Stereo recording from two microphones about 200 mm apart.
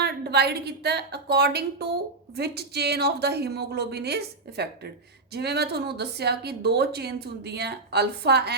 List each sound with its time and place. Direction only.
0.0 s a woman's voice: 55° right (ahead or behind)